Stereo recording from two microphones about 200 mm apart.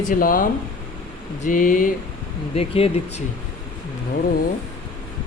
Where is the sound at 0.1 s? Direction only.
45° left (ahead or behind).